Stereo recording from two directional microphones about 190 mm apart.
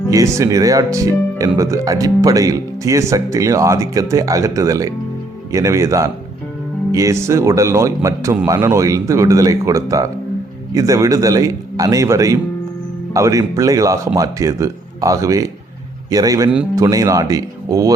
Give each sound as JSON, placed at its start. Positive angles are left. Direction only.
{"t": 0.1, "sound": "speech", "side_deg": -15}